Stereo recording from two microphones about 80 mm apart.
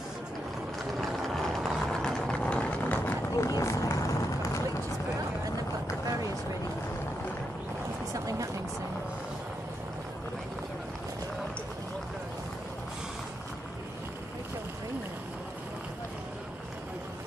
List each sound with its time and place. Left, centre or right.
1.0 s vehicle: centre
3.3 s vehicle: left
8.1 s a sound: right